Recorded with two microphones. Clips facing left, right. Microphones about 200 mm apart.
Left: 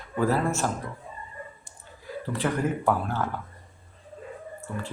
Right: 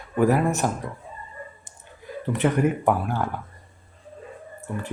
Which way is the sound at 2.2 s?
20° right (ahead or behind).